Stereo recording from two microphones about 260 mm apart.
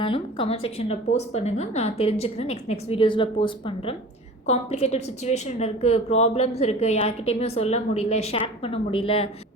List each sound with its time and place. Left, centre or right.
0.0 s a woman's voice: centre